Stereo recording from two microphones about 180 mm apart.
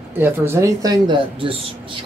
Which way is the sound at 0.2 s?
15° right (ahead or behind).